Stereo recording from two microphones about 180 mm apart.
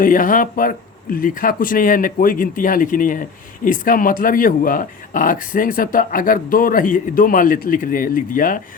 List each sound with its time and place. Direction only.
0.0 s speech: 50° left (ahead or behind)